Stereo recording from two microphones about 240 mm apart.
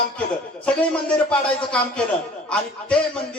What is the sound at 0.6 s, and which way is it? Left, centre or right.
Speech, centre.